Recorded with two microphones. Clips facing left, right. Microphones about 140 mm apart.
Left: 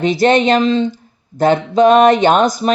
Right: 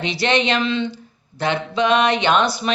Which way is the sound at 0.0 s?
45° left (ahead or behind).